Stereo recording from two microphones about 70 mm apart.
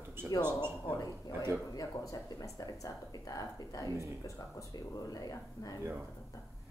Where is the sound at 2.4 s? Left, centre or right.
Left.